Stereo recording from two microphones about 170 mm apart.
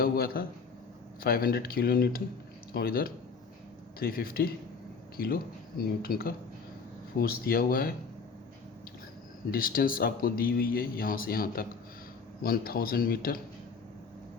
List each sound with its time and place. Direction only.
0.0 s speech: 60° left (ahead or behind)
9.5 s speech: 55° left (ahead or behind)